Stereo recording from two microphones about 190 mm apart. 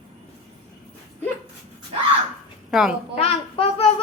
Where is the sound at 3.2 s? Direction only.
30° left (ahead or behind).